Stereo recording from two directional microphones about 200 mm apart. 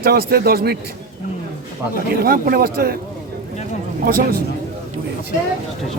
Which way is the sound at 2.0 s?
45° right (ahead or behind).